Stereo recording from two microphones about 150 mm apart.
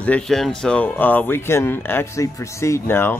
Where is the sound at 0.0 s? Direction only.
5° left (ahead or behind).